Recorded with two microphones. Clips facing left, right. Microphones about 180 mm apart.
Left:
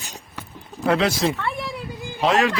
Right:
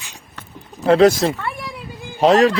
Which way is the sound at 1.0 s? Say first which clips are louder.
Right 8 dB; 45° right (ahead or behind).